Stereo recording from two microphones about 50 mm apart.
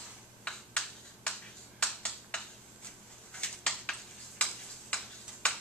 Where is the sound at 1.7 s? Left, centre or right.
Centre.